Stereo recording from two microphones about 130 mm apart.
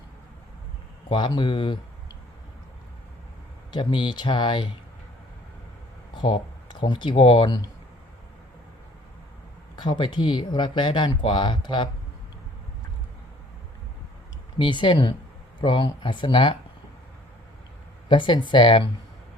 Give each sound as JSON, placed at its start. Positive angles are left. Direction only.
{"t": 1.1, "sound": "speech", "side_deg": 35}
{"t": 3.7, "sound": "speech", "side_deg": 40}
{"t": 6.1, "sound": "speech", "side_deg": 40}
{"t": 9.7, "sound": "speech", "side_deg": 35}
{"t": 14.6, "sound": "speech", "side_deg": 40}
{"t": 18.1, "sound": "speech", "side_deg": 35}